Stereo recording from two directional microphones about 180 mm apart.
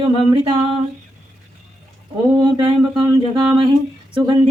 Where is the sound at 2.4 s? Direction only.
25° right (ahead or behind).